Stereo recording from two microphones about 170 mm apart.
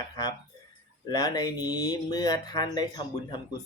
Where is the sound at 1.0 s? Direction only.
20° left (ahead or behind).